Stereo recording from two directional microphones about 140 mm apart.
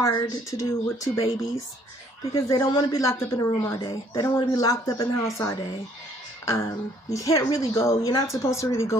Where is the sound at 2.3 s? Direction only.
25° left (ahead or behind).